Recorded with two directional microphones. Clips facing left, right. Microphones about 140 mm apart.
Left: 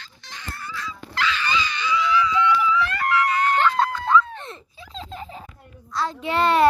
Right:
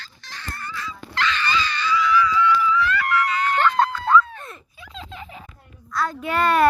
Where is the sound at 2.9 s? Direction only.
50° left (ahead or behind).